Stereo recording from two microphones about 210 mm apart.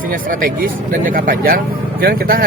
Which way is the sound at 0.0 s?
40° right (ahead or behind).